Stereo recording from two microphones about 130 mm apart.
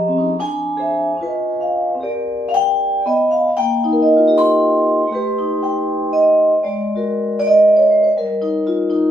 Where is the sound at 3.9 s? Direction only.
Centre (ahead or behind).